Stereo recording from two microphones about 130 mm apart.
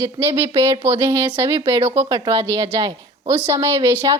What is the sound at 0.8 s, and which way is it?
A woman's voice, 15° right (ahead or behind).